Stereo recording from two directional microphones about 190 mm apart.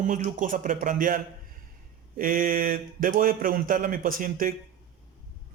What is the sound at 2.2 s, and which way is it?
Speech, 45° right (ahead or behind).